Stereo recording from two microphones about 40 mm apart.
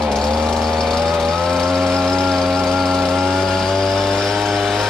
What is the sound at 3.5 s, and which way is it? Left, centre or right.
Chainsaw, centre.